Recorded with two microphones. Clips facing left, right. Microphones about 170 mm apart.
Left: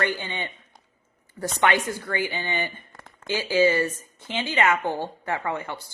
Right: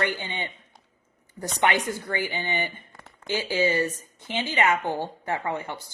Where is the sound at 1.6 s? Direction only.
15° right (ahead or behind).